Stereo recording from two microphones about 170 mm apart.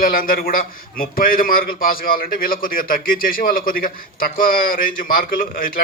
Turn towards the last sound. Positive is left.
turn(degrees=55)  # may be behind; listen again after turning